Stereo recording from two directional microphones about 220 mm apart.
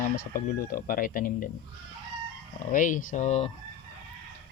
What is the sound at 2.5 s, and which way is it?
Fowl, 35° left (ahead or behind).